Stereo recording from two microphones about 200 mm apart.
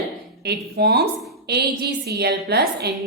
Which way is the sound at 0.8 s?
55° right (ahead or behind).